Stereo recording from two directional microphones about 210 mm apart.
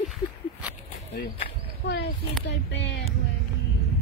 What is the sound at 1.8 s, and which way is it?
Speech, 55° left (ahead or behind).